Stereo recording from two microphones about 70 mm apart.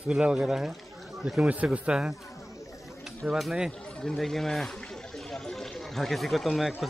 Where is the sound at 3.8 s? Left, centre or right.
Centre.